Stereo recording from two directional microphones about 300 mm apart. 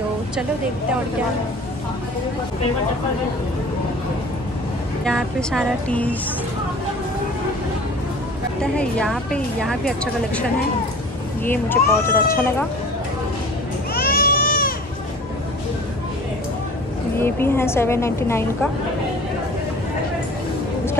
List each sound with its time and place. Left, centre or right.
5.0 s a woman's voice: centre
8.7 s a woman's voice: centre
11.4 s a woman's voice: centre
13.9 s baby cry: left
17.2 s a woman's voice: centre